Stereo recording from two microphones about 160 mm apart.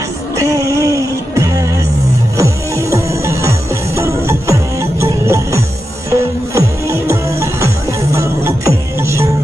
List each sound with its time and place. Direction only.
0.4 s music: 20° right (ahead or behind)